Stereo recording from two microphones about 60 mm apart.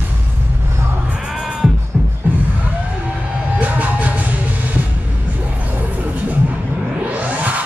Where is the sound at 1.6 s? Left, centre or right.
Centre.